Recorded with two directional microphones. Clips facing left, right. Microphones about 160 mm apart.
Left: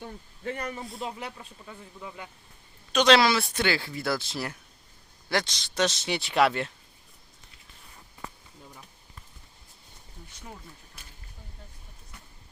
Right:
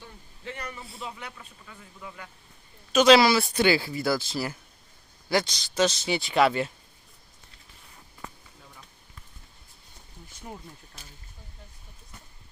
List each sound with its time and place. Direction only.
0.0 s a man's voice: 50° left (ahead or behind)
1.0 s speech: 30° left (ahead or behind)
2.9 s speech: 5° right (ahead or behind)